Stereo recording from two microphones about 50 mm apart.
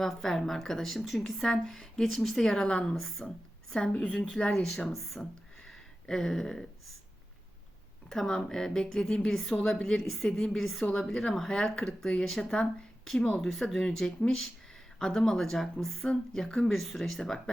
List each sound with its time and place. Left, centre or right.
0.0 s a woman's voice: centre
2.9 s a woman's voice: centre
3.9 s a woman's voice: left
4.9 s a woman's voice: centre
5.5 s a sound: centre
8.1 s a woman's voice: centre
10.0 s a woman's voice: centre
10.2 s a woman's voice: centre